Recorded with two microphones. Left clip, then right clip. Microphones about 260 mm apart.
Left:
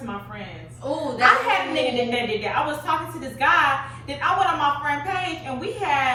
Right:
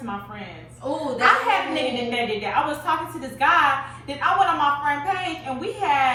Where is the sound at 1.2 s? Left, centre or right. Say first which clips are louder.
Left 1 dB; centre.